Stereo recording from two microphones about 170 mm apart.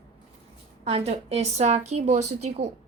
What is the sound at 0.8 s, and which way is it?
A woman's voice, 35° right (ahead or behind).